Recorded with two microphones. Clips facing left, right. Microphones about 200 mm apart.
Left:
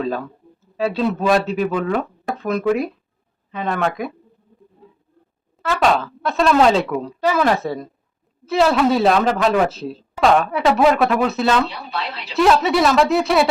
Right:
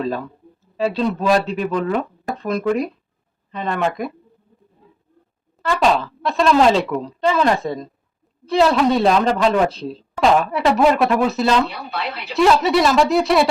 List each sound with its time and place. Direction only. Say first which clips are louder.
0.0 s speech: even; centre (ahead or behind)
5.6 s speech: even; centre (ahead or behind)
11.7 s speech: right 1 dB; 55° right (ahead or behind)
12.3 s speech: right 1 dB; centre (ahead or behind)